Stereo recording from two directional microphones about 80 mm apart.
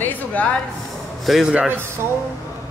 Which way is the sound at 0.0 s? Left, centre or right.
Centre.